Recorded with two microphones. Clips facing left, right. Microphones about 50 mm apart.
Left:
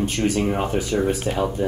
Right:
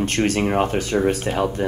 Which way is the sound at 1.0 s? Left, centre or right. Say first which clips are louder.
Right 2 dB; right.